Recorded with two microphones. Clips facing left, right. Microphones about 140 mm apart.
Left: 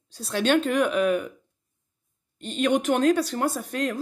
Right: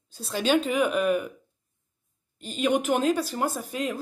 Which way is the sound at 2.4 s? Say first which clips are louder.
Left 2 dB; 5° right (ahead or behind).